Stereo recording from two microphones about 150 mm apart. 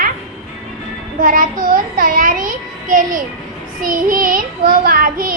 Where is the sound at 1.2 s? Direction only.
70° right (ahead or behind).